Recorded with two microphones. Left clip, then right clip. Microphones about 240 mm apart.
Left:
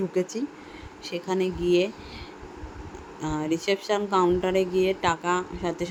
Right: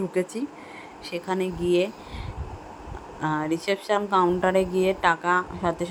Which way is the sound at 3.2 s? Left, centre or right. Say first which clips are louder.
Right 2 dB; centre.